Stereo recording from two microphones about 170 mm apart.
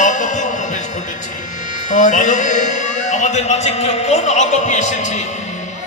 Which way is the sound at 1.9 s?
45° left (ahead or behind).